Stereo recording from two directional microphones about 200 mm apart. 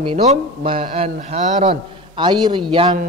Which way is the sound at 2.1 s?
25° right (ahead or behind).